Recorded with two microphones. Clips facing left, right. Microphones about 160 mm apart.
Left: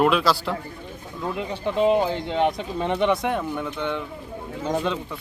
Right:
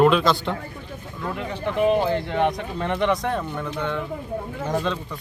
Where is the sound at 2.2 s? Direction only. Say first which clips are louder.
Even; 20° left (ahead or behind).